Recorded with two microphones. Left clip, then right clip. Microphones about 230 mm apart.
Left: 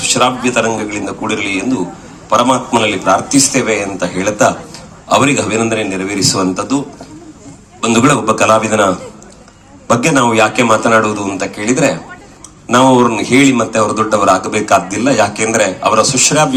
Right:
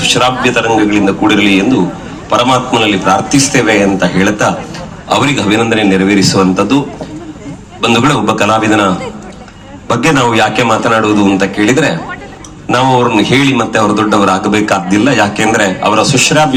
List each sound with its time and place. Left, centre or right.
0.0 s a man's voice: left
7.8 s a man's voice: left
10.0 s a man's voice: left